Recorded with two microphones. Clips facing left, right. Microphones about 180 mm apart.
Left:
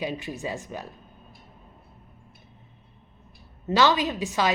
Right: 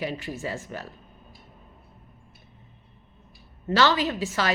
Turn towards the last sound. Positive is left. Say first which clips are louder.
# left 1 dB
turn(degrees=15)  # may be behind; listen again after turning